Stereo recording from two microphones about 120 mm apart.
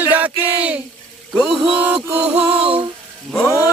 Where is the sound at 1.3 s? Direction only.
5° right (ahead or behind).